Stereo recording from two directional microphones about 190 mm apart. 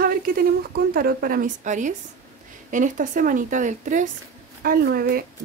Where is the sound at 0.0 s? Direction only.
50° right (ahead or behind).